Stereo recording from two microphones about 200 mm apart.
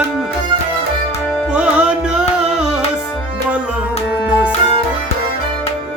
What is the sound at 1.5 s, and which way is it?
Music, 5° right (ahead or behind).